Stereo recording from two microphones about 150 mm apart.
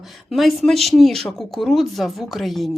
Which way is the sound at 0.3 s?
Centre (ahead or behind).